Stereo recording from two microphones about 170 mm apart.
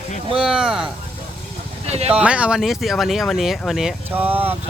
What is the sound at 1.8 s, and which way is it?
Speech, 40° right (ahead or behind).